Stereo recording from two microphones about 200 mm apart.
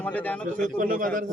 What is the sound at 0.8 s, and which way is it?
Speech, 45° right (ahead or behind).